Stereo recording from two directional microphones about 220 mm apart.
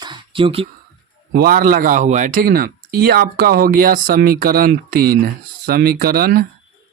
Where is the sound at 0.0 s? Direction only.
20° right (ahead or behind).